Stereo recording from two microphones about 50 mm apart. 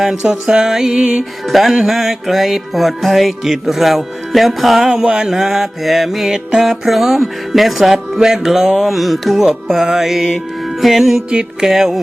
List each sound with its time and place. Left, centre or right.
0.2 s mantra: centre
1.5 s music: centre
4.9 s mantra: centre
11.3 s music: centre
11.7 s mantra: centre